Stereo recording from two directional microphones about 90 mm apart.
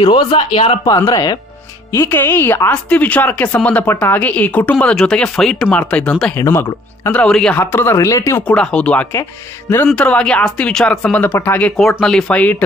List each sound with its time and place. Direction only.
0.0 s speech: 60° left (ahead or behind); by 0.7 s 80° left
0.8 s speech: 45° left (ahead or behind)
1.9 s speech: 25° left (ahead or behind)
6.3 s speech: 25° left (ahead or behind)
7.2 s speech: 5° left (ahead or behind)
7.5 s speech: 25° left (ahead or behind)
8.4 s speech: 15° left (ahead or behind)